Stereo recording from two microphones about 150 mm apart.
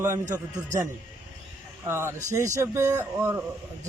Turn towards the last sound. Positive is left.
turn(degrees=-15)  # may be behind; listen again after turning